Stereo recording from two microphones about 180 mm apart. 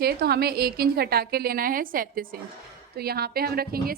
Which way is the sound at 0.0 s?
60° right (ahead or behind).